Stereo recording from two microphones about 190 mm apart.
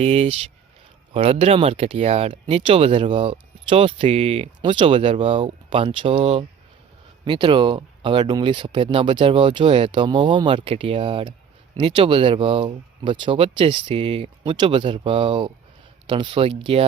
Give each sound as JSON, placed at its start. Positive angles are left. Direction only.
{"t": 0.0, "sound": "speech", "side_deg": -35}